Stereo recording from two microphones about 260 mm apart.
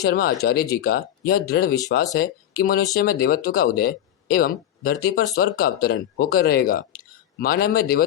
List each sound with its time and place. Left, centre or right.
0.0 s speech: left